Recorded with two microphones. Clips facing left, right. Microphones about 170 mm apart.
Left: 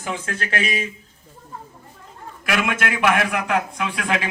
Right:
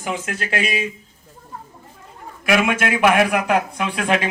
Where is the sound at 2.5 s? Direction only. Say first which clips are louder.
Right 5 dB; 20° right (ahead or behind).